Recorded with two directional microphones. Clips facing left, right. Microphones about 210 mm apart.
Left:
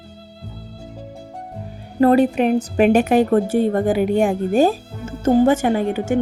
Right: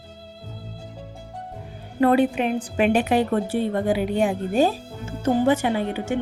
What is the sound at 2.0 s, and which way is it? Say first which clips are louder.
A woman's voice: left 4 dB; 40° left (ahead or behind).